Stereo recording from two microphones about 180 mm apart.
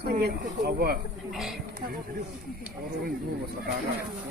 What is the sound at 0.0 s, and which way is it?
Speech, 60° right (ahead or behind).